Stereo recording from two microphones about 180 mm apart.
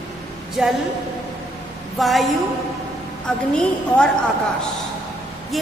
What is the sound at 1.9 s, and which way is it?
Speech, centre (ahead or behind).